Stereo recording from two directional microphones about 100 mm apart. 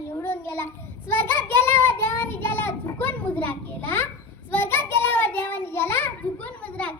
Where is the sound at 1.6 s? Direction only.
25° left (ahead or behind).